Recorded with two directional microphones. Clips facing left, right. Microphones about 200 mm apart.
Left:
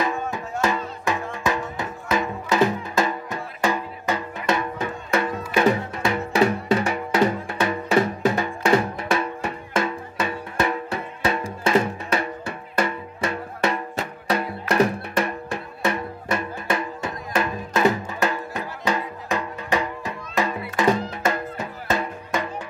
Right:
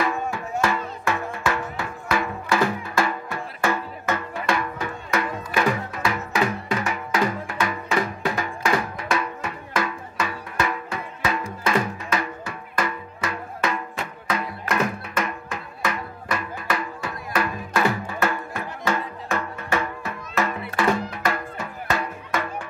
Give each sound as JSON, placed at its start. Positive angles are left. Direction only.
{"t": 0.0, "sound": "music", "side_deg": 20}